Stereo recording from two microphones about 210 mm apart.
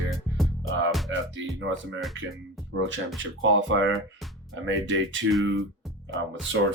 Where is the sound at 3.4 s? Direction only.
65° right (ahead or behind).